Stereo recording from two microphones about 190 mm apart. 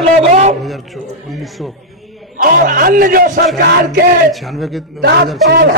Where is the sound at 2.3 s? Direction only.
45° right (ahead or behind).